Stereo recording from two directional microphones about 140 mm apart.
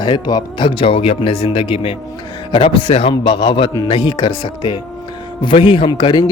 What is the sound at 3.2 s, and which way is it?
Speech, 35° left (ahead or behind).